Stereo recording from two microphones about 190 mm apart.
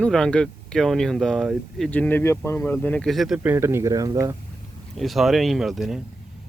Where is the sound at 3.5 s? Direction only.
15° right (ahead or behind).